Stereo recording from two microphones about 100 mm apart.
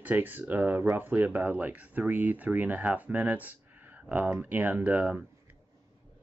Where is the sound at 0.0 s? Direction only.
20° right (ahead or behind).